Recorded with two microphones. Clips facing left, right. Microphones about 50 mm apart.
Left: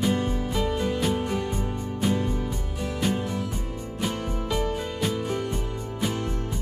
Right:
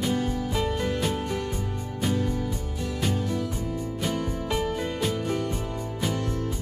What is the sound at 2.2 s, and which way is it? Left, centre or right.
Music, left.